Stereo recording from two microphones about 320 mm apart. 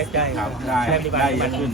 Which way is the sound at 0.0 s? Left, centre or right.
Centre.